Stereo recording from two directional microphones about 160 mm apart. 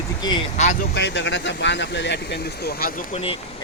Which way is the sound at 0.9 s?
90° left.